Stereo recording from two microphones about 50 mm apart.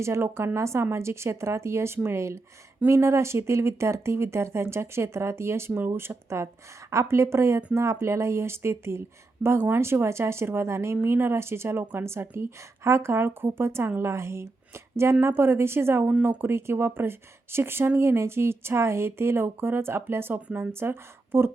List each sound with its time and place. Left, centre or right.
0.0 s speech: right
5.7 s speech: right
9.6 s speech: right
11.8 s speech: right
12.2 s speech: right
13.2 s a woman's voice: right